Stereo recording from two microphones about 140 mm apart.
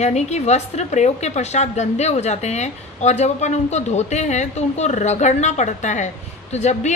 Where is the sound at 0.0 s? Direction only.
55° left (ahead or behind).